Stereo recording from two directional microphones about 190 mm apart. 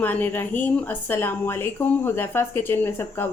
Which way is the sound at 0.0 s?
10° left (ahead or behind).